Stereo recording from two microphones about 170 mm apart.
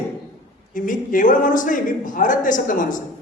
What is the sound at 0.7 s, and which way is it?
A man's voice, 50° left (ahead or behind).